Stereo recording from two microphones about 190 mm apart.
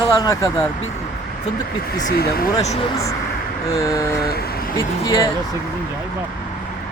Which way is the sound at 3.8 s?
15° left (ahead or behind).